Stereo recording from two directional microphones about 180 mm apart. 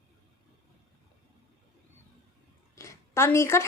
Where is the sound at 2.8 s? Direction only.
15° left (ahead or behind).